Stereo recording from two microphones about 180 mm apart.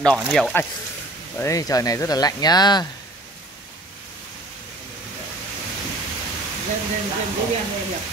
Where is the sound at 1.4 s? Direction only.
20° left (ahead or behind).